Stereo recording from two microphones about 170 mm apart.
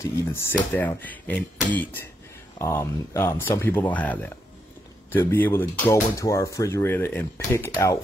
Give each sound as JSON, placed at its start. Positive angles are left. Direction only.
{"t": 0.0, "sound": "speech", "side_deg": 15}